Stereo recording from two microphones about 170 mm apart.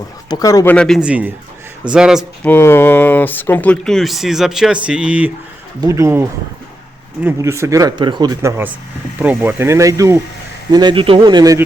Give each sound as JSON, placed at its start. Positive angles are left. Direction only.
{"t": 0.3, "sound": "a man's voice", "side_deg": 20}
{"t": 0.7, "sound": "speech", "side_deg": 5}
{"t": 2.4, "sound": "speech", "side_deg": 10}
{"t": 5.8, "sound": "speech", "side_deg": -20}